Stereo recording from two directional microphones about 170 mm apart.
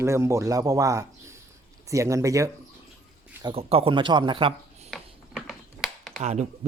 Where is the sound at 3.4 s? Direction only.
35° right (ahead or behind).